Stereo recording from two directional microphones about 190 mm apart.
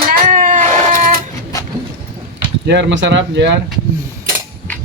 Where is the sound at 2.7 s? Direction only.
65° right (ahead or behind).